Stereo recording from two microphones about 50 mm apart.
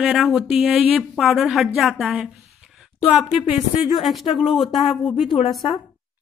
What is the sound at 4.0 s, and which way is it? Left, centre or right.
A woman's voice, centre.